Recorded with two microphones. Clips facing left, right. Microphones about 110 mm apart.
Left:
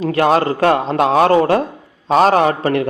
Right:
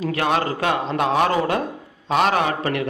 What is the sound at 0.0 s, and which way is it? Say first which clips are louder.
A man's voice: left 7 dB; 35° left (ahead or behind).